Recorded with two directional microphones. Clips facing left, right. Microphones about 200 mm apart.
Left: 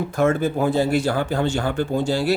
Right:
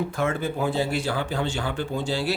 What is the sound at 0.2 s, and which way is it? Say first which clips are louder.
Speech: left 9 dB; 45° left (ahead or behind).